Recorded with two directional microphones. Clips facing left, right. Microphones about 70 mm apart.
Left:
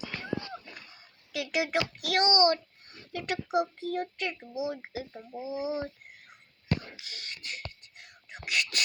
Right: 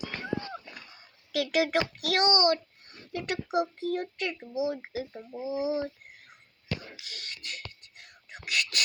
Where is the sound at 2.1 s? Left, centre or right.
Left.